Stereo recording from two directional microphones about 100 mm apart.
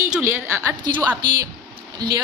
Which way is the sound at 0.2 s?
25° right (ahead or behind).